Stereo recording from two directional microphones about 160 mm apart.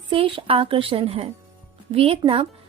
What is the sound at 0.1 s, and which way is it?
A woman's voice, 35° right (ahead or behind).